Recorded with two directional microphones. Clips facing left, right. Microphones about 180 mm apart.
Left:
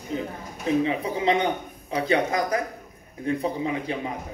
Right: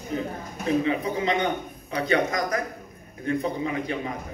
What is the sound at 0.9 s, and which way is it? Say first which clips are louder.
A man's voice: left 1 dB; 30° left (ahead or behind).